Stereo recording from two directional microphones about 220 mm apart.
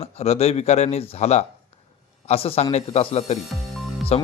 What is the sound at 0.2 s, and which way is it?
Speech, 30° left (ahead or behind).